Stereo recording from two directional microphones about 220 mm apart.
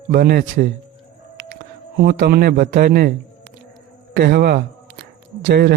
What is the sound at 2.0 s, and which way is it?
A man's voice, 45° right (ahead or behind).